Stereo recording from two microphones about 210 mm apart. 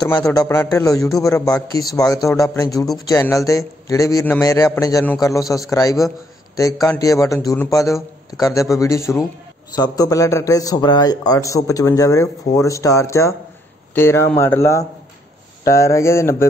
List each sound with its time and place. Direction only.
0.0 s a man's voice: 15° left (ahead or behind)